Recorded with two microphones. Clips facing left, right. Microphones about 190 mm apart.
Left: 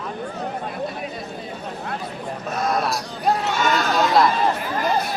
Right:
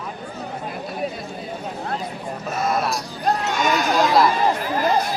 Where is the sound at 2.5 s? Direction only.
Centre (ahead or behind).